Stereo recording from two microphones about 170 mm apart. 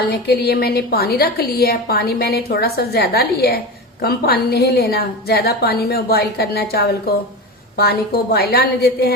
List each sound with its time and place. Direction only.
0.1 s a woman's voice: 70° left (ahead or behind)